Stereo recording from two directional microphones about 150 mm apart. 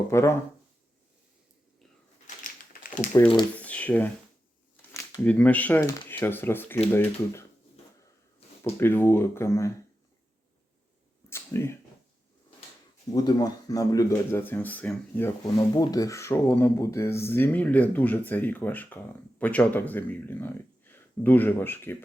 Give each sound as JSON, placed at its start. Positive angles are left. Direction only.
{"t": 0.1, "sound": "speech", "side_deg": 20}
{"t": 2.2, "sound": "a sound", "side_deg": 60}
{"t": 3.2, "sound": "speech", "side_deg": 30}
{"t": 3.6, "sound": "speech", "side_deg": 10}
{"t": 4.9, "sound": "a sound", "side_deg": 15}
{"t": 5.3, "sound": "speech", "side_deg": 10}
{"t": 8.8, "sound": "speech", "side_deg": 15}
{"t": 11.3, "sound": "a sound", "side_deg": 15}
{"t": 13.1, "sound": "speech", "side_deg": 25}
{"t": 15.7, "sound": "speech", "side_deg": 25}